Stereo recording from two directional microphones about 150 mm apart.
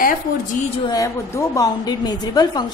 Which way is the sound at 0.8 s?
20° left (ahead or behind).